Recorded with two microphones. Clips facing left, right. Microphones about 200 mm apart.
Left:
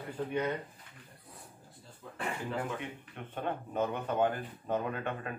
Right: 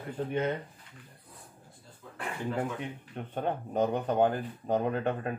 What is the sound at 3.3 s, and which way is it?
Speech, 40° right (ahead or behind).